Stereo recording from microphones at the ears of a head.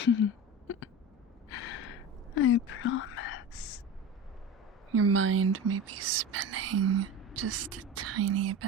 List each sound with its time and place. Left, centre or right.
0.0 s a sound: left
1.5 s whispering: left
4.9 s speech: right